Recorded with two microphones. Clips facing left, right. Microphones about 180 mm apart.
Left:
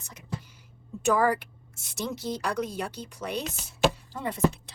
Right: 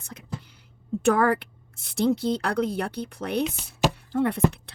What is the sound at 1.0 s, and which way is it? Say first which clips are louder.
A woman's voice: right 3 dB; 60° right (ahead or behind).